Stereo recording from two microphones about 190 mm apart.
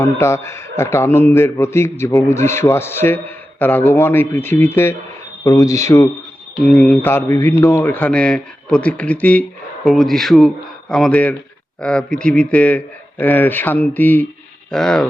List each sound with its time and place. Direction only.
0.0 s a man's voice: 15° left (ahead or behind)